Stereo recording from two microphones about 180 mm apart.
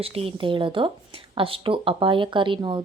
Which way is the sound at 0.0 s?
35° right (ahead or behind).